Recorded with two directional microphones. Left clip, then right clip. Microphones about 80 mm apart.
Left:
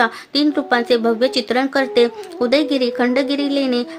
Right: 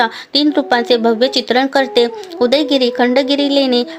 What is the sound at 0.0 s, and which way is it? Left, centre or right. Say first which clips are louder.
A woman's voice: right 3 dB; right.